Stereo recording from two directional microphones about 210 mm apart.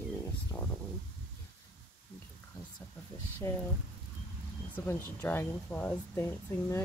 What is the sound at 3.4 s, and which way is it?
Speech, 10° left (ahead or behind).